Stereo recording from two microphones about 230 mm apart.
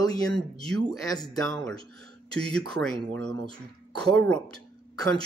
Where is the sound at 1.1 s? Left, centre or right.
Centre.